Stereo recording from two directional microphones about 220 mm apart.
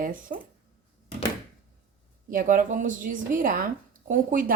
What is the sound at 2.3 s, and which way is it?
A woman's voice, 35° right (ahead or behind).